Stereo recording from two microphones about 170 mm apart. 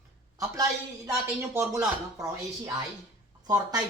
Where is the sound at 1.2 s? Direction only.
15° right (ahead or behind).